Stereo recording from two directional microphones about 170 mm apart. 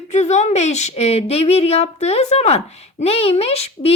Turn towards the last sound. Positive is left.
turn(degrees=35)  # may be behind; listen again after turning